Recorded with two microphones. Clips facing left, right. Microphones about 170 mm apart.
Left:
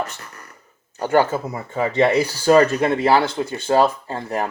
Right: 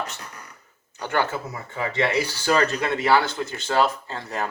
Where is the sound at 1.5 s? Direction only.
25° left (ahead or behind).